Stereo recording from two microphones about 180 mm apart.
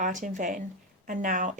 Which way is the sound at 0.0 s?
45° right (ahead or behind).